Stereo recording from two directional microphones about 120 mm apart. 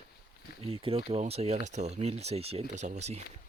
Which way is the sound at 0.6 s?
55° right (ahead or behind).